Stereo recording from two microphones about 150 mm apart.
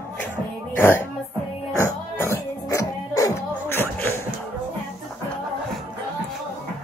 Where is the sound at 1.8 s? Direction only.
15° left (ahead or behind).